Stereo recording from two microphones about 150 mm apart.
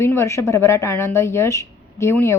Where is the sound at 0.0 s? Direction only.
15° left (ahead or behind).